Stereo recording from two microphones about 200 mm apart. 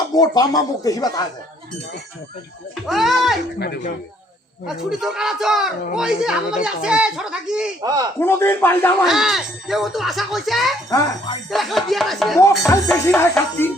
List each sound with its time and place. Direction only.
0.2 s speech: 20° left (ahead or behind)
2.8 s speech: centre (ahead or behind)
3.6 s speech: 50° left (ahead or behind)
4.6 s speech: centre (ahead or behind)
7.8 s a man's voice: 20° right (ahead or behind)
8.2 s speech: 10° left (ahead or behind)
9.0 s speech: centre (ahead or behind)
10.8 s speech: 15° left (ahead or behind)
11.5 s speech: centre (ahead or behind)
12.4 s speech: 15° left (ahead or behind)